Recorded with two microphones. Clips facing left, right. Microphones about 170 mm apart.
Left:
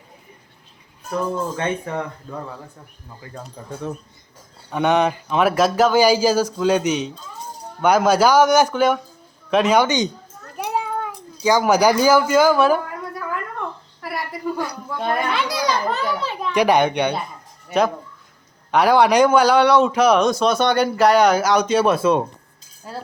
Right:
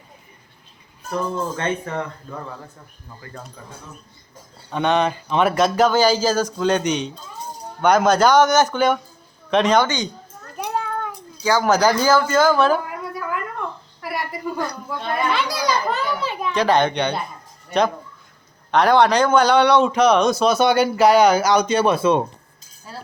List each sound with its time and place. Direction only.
1.1 s a man's voice: 15° left (ahead or behind)
3.6 s speech: 40° left (ahead or behind)
4.7 s a man's voice: 10° left (ahead or behind)
14.0 s a sound: centre (ahead or behind)
15.3 s children playing: centre (ahead or behind)
16.5 s a man's voice: 15° left (ahead or behind)